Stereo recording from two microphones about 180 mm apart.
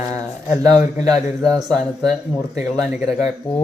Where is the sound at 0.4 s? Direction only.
15° right (ahead or behind).